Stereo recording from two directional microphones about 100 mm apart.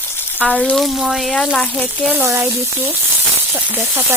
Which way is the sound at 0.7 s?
Centre (ahead or behind).